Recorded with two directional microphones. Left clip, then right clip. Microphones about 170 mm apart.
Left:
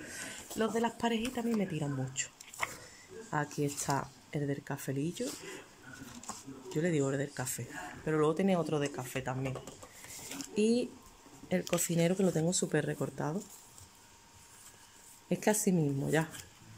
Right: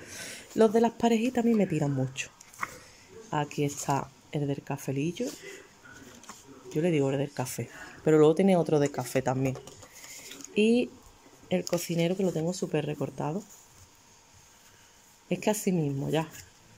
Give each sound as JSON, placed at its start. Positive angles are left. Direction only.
{"t": 0.1, "sound": "speech", "side_deg": -20}
{"t": 6.7, "sound": "speech", "side_deg": -10}
{"t": 10.5, "sound": "speech", "side_deg": -10}
{"t": 15.2, "sound": "speech", "side_deg": -5}